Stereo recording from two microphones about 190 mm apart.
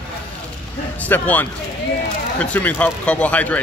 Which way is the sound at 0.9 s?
10° left (ahead or behind).